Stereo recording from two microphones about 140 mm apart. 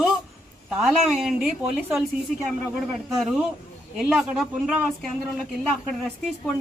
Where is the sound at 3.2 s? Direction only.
5° right (ahead or behind).